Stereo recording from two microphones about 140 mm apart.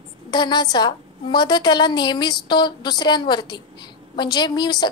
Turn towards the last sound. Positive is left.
turn(degrees=30)  # may be behind; listen again after turning